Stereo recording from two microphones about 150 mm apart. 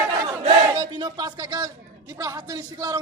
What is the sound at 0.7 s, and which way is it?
Music, 25° right (ahead or behind).